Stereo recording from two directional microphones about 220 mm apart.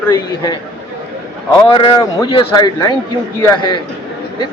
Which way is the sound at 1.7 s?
20° left (ahead or behind).